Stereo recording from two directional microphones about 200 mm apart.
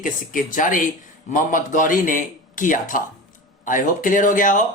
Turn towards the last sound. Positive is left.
turn(degrees=40)  # may be behind; listen again after turning